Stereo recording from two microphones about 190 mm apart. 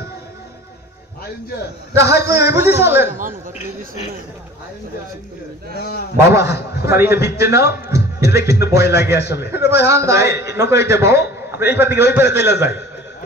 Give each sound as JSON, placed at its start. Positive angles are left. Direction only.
{"t": 2.0, "sound": "a man's voice", "side_deg": -15}
{"t": 3.1, "sound": "speech", "side_deg": -45}
{"t": 5.8, "sound": "a man's voice", "side_deg": 55}
{"t": 6.8, "sound": "a man's voice", "side_deg": -15}
{"t": 9.2, "sound": "a man's voice", "side_deg": 60}
{"t": 9.5, "sound": "a man's voice", "side_deg": -15}